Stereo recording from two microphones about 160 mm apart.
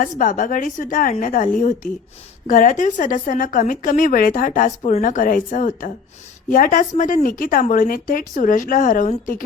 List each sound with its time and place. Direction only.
0.0 s a woman's voice: 55° left (ahead or behind)